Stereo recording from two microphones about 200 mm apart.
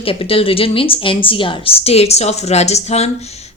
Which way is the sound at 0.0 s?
25° left (ahead or behind).